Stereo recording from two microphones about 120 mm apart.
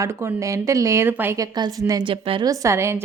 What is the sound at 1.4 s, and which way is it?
Speech, 30° right (ahead or behind).